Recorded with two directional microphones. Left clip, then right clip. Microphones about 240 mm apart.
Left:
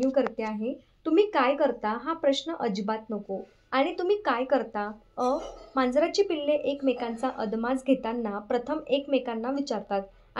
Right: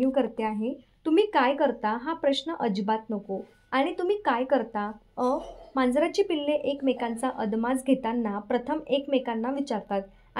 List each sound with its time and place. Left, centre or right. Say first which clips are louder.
0.0 s speech: even; centre